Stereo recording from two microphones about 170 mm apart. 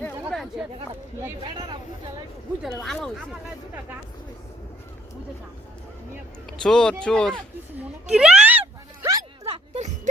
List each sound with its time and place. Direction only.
0.0 s chatter: centre (ahead or behind)
1.5 s a sound: 25° right (ahead or behind)
2.8 s speech: centre (ahead or behind)
6.6 s speech: 5° left (ahead or behind)
8.1 s a sound: 5° right (ahead or behind)
9.4 s music: 40° right (ahead or behind)